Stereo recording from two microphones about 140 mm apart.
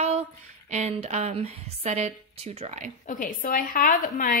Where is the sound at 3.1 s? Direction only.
65° left (ahead or behind).